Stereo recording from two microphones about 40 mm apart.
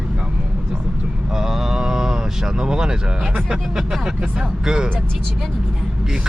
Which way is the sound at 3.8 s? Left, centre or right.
Centre.